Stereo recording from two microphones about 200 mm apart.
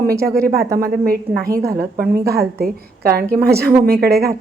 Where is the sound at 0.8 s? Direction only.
50° right (ahead or behind).